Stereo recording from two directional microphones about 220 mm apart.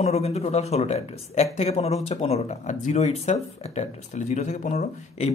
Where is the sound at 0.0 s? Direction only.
30° left (ahead or behind).